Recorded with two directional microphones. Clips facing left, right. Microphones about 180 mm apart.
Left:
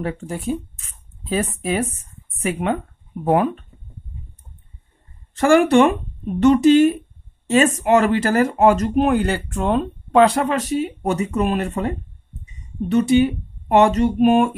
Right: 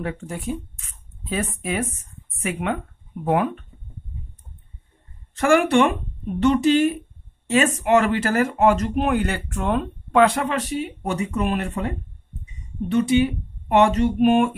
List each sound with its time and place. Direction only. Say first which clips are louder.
1.3 s speech: left 4 dB; 35° left (ahead or behind)
5.3 s speech: left 3 dB; 35° left (ahead or behind)